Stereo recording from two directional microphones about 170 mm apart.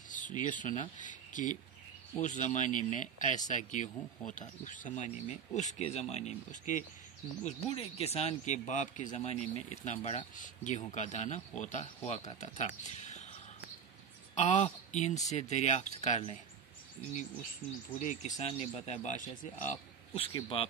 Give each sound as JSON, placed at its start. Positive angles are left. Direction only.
{"t": 0.1, "sound": "speech", "side_deg": 50}
{"t": 7.4, "sound": "speech", "side_deg": 35}
{"t": 14.3, "sound": "speech", "side_deg": 40}
{"t": 17.9, "sound": "speech", "side_deg": 50}
{"t": 20.2, "sound": "speech", "side_deg": 30}